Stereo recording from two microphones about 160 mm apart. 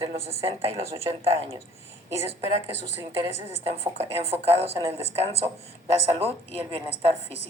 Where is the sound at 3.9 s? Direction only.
35° right (ahead or behind).